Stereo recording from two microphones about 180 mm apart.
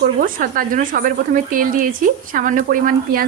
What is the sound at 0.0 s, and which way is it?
Speech, 55° right (ahead or behind).